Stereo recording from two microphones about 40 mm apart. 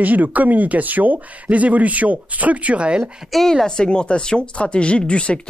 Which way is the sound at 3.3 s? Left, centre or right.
Centre.